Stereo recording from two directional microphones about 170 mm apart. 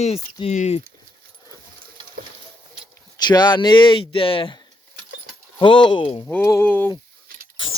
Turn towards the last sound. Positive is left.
turn(degrees=10)  # may be behind; listen again after turning